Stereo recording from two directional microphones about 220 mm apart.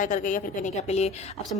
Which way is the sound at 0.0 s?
35° left (ahead or behind).